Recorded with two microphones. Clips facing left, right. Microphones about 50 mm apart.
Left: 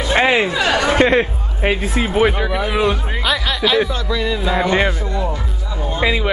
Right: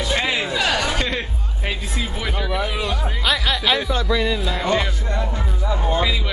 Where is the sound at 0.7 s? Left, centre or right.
Left.